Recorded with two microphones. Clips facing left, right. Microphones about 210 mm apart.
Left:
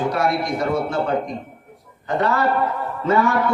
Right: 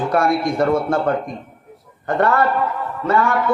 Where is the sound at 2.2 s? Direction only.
55° right (ahead or behind).